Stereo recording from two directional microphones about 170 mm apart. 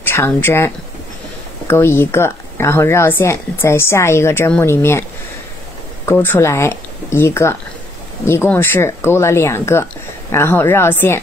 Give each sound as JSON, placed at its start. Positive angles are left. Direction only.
{"t": 0.0, "sound": "speech", "side_deg": 15}
{"t": 1.7, "sound": "speech", "side_deg": 15}
{"t": 6.0, "sound": "speech", "side_deg": 15}